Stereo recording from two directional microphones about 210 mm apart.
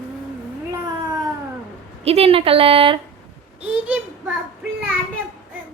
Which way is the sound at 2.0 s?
30° right (ahead or behind).